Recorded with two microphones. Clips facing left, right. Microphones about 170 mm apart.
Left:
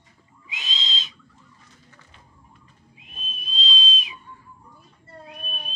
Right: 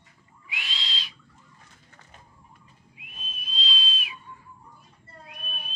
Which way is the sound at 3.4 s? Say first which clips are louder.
Left 4 dB; 20° left (ahead or behind).